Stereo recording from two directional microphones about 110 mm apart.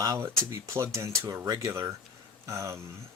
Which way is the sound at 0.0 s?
30° right (ahead or behind).